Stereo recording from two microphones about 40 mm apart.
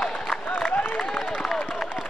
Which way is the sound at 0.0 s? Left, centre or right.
Left.